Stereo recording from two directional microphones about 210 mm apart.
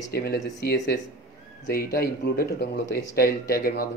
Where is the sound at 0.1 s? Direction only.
50° left (ahead or behind).